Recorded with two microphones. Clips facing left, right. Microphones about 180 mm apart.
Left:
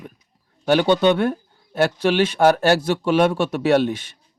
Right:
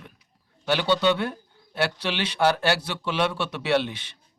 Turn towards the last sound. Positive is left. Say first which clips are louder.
# left 6 dB
turn(degrees=45)  # may be behind; listen again after turning